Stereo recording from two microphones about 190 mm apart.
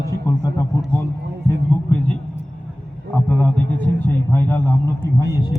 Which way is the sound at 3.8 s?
10° left (ahead or behind).